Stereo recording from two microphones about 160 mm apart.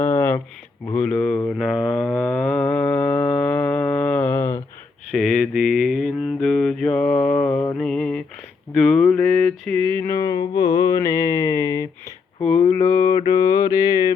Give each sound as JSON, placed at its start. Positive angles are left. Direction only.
{"t": 0.0, "sound": "a sound", "side_deg": 15}
{"t": 1.2, "sound": "mantra", "side_deg": 10}
{"t": 5.1, "sound": "mantra", "side_deg": 0}
{"t": 7.8, "sound": "mantra", "side_deg": 5}
{"t": 8.7, "sound": "a sound", "side_deg": 5}
{"t": 10.0, "sound": "mantra", "side_deg": 20}